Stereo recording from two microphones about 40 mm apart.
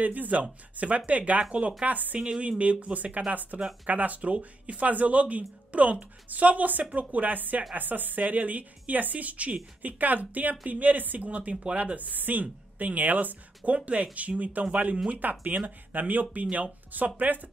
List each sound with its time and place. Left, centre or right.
0.0 s a woman's voice: right
13.7 s a woman's voice: right